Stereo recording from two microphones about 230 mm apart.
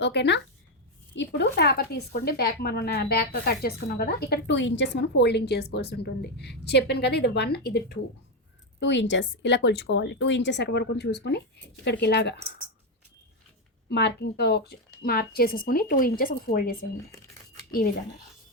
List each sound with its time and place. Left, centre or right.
0.0 s a woman's voice: left
13.9 s a woman's voice: left